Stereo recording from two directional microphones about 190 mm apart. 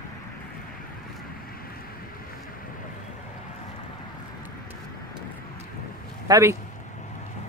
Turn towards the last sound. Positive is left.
turn(degrees=-15)  # may be behind; listen again after turning